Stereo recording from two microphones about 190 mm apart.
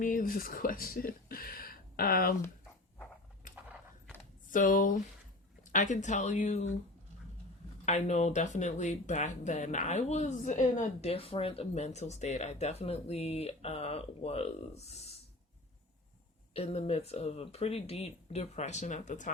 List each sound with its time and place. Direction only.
0.0 s speech: 45° left (ahead or behind)
4.5 s speech: 45° left (ahead or behind)
7.9 s speech: 35° left (ahead or behind)
16.6 s speech: 35° left (ahead or behind)